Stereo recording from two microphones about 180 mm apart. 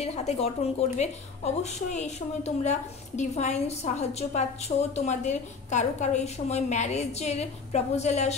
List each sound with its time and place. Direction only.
0.0 s speech: 35° left (ahead or behind)